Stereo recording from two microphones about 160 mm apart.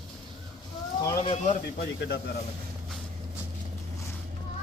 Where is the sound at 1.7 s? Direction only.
90° left.